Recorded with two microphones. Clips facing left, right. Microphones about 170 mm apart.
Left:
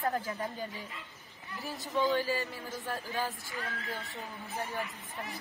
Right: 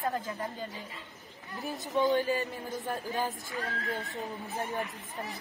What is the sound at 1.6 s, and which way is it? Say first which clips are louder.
Speech: right 3 dB; 20° right (ahead or behind).